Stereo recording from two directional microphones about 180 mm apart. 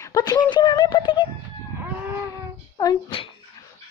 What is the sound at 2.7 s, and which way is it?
Speech, 25° left (ahead or behind).